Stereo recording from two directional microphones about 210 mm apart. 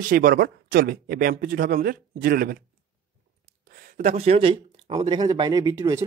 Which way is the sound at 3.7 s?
40° right (ahead or behind).